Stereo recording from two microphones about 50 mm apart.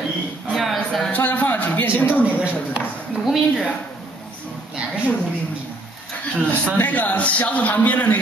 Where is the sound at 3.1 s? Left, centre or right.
Centre.